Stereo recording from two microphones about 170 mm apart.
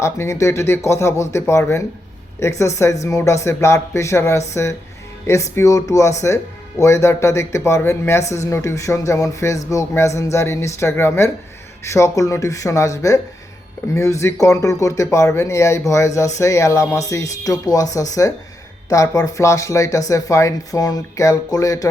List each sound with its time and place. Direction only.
0.0 s speech: 15° left (ahead or behind)